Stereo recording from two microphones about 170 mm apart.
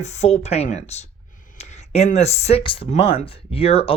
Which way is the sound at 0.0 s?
40° left (ahead or behind).